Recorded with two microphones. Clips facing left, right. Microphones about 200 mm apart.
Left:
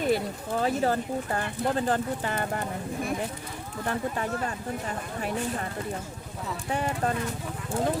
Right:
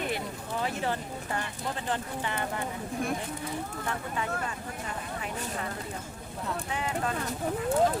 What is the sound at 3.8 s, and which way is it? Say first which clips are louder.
Speech: left 6 dB; 45° left (ahead or behind).